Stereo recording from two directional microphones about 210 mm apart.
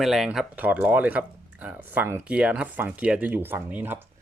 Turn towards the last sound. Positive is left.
turn(degrees=-10)  # may be behind; listen again after turning